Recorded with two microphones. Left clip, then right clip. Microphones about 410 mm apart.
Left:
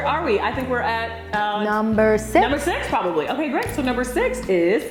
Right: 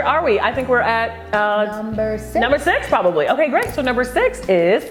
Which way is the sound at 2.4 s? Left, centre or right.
Right.